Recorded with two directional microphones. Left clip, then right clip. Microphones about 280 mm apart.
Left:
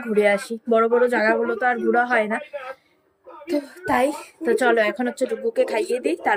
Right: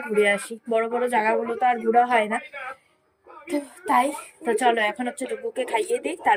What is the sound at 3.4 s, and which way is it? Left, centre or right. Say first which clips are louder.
Speech: left 2 dB; centre.